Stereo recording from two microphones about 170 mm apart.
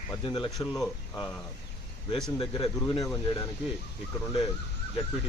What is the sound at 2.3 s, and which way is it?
Speech, 30° left (ahead or behind).